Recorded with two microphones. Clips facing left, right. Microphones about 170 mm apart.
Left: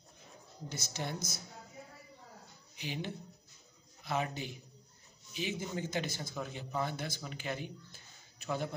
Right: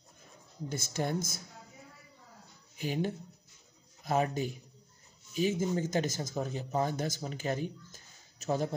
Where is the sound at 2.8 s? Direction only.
45° right (ahead or behind).